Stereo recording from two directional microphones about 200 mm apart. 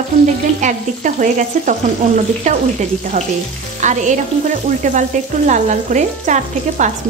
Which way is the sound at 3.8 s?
35° right (ahead or behind).